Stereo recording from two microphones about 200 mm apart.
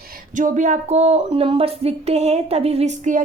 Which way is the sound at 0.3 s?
40° right (ahead or behind).